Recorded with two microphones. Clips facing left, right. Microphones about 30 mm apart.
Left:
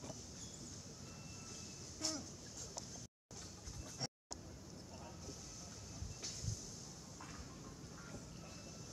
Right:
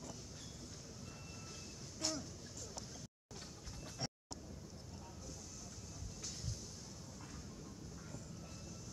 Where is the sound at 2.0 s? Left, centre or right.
Right.